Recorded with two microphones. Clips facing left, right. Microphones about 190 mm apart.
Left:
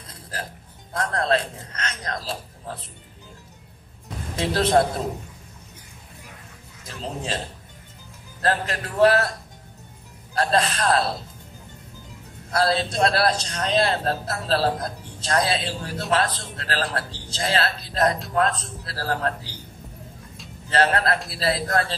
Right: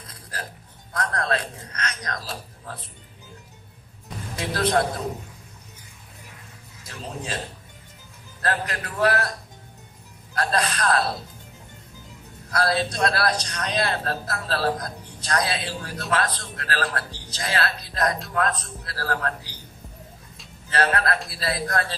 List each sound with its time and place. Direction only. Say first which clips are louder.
0.1 s music: left 3 dB; 25° left (ahead or behind)
0.9 s a man's voice: left 3 dB; 25° left (ahead or behind)
4.4 s a man's voice: left 3 dB; 25° left (ahead or behind)
8.5 s a man's voice: left 3 dB; 25° left (ahead or behind)
10.3 s a man's voice: left 3 dB; 25° left (ahead or behind)
12.4 s a man's voice: left 2 dB; 25° left (ahead or behind)
20.7 s a man's voice: left 2 dB; 25° left (ahead or behind)